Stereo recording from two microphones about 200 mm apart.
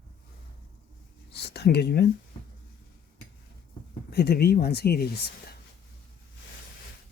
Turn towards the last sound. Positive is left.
turn(degrees=50)  # may be behind; listen again after turning